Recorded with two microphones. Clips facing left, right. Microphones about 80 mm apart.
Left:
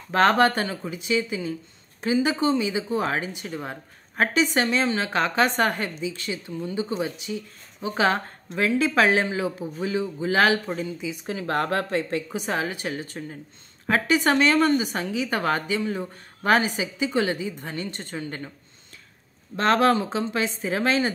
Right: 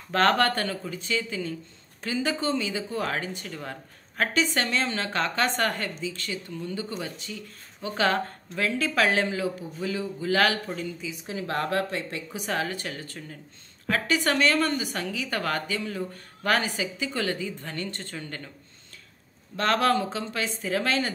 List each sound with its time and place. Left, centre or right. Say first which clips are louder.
0.1 s speech: left 3 dB; centre
11.2 s speech: left 3 dB; left
12.4 s speech: right 1 dB; centre
19.5 s speech: left 3 dB; left